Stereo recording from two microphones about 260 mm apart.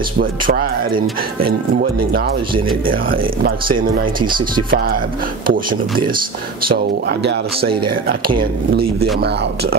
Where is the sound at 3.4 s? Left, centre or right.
Right.